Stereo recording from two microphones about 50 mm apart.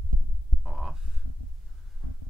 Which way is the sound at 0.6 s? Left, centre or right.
Centre.